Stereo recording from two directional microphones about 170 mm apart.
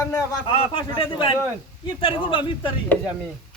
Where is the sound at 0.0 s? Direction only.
20° left (ahead or behind).